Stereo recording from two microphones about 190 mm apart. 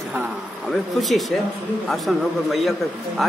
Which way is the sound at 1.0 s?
Centre (ahead or behind).